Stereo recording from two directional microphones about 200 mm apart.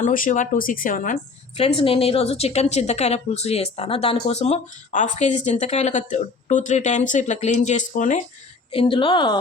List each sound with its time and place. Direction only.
0.0 s a woman's voice: 40° left (ahead or behind)
8.7 s a woman's voice: 25° left (ahead or behind)